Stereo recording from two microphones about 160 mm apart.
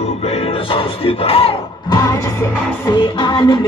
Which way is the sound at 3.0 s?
35° left (ahead or behind).